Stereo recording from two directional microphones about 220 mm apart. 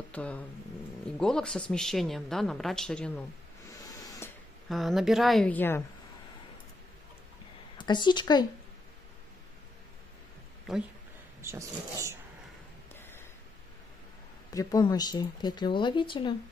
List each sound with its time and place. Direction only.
0.1 s speech: 5° left (ahead or behind)
4.0 s a sound: 15° left (ahead or behind)
4.6 s speech: centre (ahead or behind)
7.7 s a woman's voice: 20° left (ahead or behind)
10.7 s speech: centre (ahead or behind)
11.4 s speech: 15° right (ahead or behind)
14.5 s speech: 15° left (ahead or behind)